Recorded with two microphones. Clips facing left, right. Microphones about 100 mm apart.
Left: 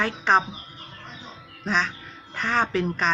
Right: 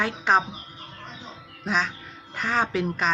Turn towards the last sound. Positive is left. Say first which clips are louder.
# left 1 dB
turn(degrees=-10)  # may be behind; listen again after turning